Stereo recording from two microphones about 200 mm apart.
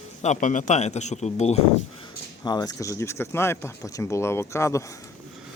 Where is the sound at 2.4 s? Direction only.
20° left (ahead or behind).